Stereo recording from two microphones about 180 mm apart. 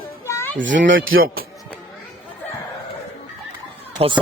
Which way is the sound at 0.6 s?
90° right.